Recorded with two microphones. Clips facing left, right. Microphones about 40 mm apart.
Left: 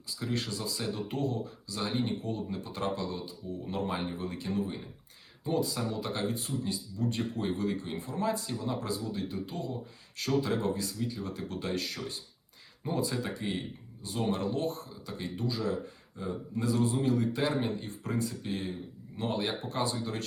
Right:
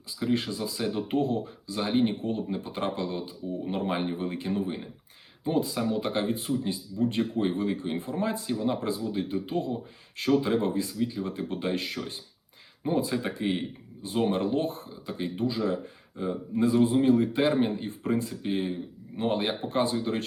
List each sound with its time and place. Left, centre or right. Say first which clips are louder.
0.1 s speech: right 6 dB; right